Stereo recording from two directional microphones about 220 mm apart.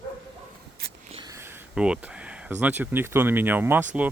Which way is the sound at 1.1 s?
15° right (ahead or behind).